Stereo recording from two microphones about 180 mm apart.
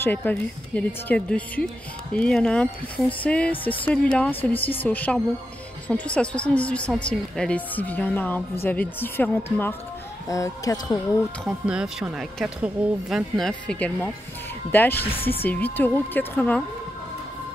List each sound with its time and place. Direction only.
0.0 s a woman's voice: 10° left (ahead or behind)
11.4 s a woman's voice: 5° right (ahead or behind)